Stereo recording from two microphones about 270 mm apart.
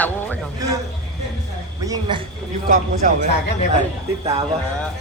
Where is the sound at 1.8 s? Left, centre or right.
Centre.